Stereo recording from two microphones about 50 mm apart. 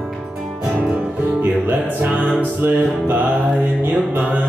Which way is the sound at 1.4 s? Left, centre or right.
Right.